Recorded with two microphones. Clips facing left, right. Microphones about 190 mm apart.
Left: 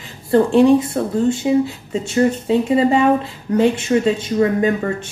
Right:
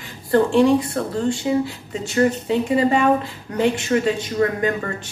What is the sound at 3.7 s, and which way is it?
Speech, 25° left (ahead or behind).